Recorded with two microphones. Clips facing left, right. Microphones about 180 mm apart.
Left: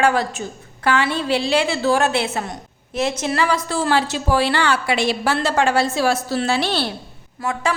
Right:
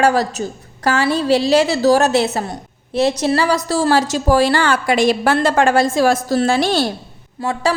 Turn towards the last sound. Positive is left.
turn(degrees=-35)  # may be behind; listen again after turning